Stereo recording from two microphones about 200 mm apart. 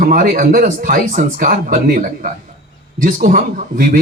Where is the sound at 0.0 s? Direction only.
40° right (ahead or behind).